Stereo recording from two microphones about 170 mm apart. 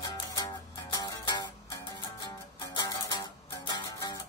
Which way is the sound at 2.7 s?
25° left (ahead or behind).